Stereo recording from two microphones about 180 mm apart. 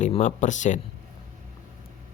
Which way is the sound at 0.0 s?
40° left (ahead or behind).